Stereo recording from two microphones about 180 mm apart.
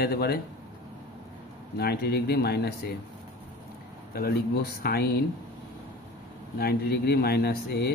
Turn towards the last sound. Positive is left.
turn(degrees=65)  # may be behind; listen again after turning